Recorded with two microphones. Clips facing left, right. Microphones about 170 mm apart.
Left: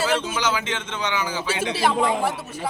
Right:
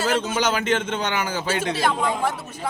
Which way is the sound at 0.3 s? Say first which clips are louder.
Right 4 dB; 50° right (ahead or behind).